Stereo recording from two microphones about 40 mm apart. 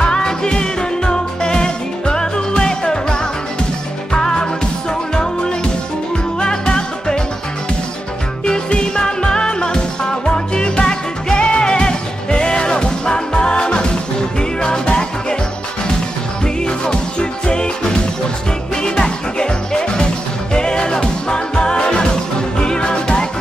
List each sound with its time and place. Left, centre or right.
0.0 s music: left
8.5 s music: left
16.6 s music: left
18.8 s music: centre